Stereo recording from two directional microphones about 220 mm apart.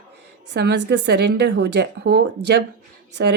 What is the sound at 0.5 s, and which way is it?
Speech, 50° right (ahead or behind).